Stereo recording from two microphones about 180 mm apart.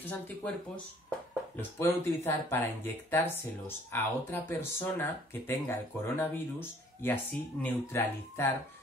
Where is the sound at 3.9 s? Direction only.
10° left (ahead or behind).